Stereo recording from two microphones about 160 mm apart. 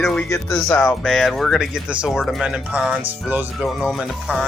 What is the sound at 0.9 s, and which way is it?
Speech, centre (ahead or behind).